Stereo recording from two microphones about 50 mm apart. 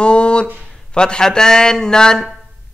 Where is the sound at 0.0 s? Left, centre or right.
Left.